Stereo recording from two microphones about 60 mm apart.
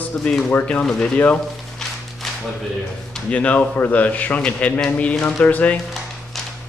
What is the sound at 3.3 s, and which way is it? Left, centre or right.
A man's voice, left.